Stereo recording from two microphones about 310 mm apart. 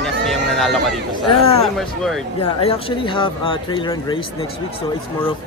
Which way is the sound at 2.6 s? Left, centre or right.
Centre.